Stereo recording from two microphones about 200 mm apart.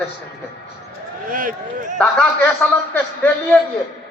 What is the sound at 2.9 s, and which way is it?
Speech, 5° left (ahead or behind).